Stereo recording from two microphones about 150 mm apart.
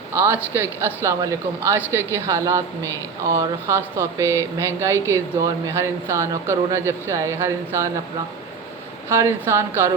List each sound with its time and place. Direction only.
0.1 s speech: 15° right (ahead or behind)
9.1 s speech: 20° right (ahead or behind)